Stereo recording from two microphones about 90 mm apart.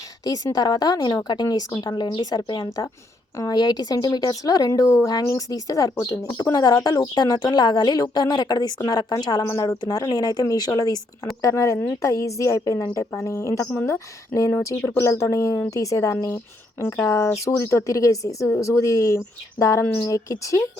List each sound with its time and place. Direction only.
0.3 s a woman's voice: 45° left (ahead or behind)
6.3 s a woman's voice: 45° left (ahead or behind)